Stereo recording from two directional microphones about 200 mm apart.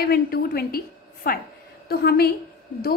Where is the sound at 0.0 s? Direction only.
50° left (ahead or behind).